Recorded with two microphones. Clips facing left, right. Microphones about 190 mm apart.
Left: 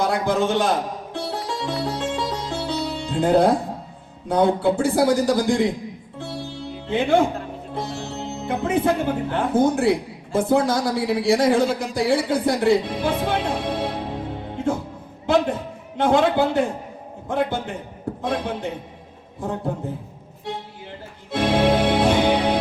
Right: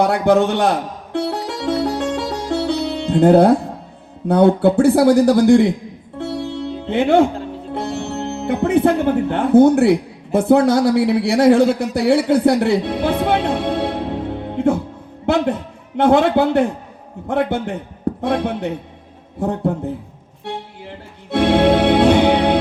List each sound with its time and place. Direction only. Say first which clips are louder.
0.0 s music: right 6 dB; 65° right (ahead or behind)
4.3 s speech: right 6 dB; 65° right (ahead or behind)
6.1 s music: right 9 dB; 65° right (ahead or behind)
7.7 s speech: right 6 dB; 65° right (ahead or behind)
14.5 s music: right 7 dB; 65° right (ahead or behind)
15.3 s a sound: right 2 dB; 65° right (ahead or behind)
16.0 s speech: right 4 dB; 65° right (ahead or behind)
21.2 s music: right 5 dB; 65° right (ahead or behind)